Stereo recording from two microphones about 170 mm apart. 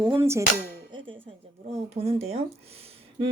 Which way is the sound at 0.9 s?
30° right (ahead or behind).